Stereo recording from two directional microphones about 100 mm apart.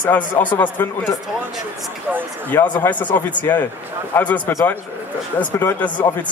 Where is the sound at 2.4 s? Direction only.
15° left (ahead or behind).